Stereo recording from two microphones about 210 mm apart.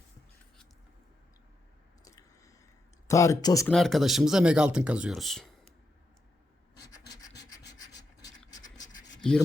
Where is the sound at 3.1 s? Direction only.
15° left (ahead or behind).